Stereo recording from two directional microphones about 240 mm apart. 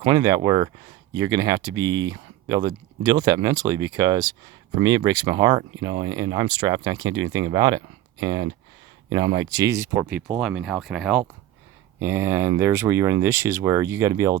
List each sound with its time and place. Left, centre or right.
0.0 s speech: centre